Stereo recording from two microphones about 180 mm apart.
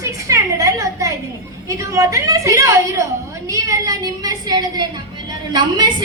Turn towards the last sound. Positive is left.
turn(degrees=-25)  # may be behind; listen again after turning